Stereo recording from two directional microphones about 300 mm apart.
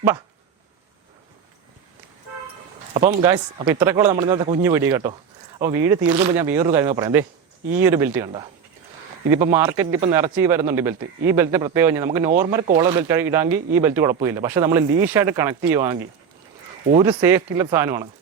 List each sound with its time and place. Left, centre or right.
2.9 s a man's voice: centre
17.0 s a man's voice: centre